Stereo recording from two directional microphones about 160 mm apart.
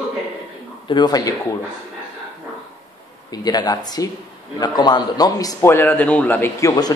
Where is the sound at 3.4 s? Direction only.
25° left (ahead or behind).